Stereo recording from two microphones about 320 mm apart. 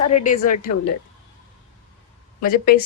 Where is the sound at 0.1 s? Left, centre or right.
Left.